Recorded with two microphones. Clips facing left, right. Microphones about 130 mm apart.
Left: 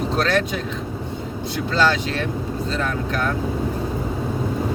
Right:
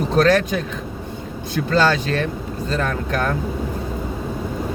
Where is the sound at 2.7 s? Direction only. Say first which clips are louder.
Right 4 dB; 45° right (ahead or behind).